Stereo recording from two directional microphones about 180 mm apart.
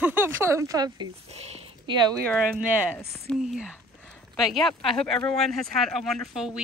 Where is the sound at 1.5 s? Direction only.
25° right (ahead or behind).